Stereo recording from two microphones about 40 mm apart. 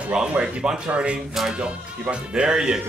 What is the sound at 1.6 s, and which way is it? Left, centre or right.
Speech, right.